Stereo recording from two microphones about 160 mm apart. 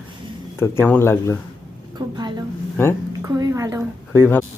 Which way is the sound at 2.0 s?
25° right (ahead or behind).